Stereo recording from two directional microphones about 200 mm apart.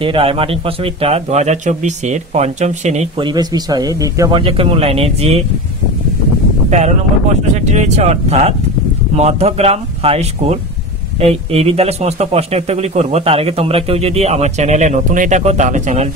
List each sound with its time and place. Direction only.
0.0 s a man's voice: 25° right (ahead or behind)
6.7 s a man's voice: 35° right (ahead or behind)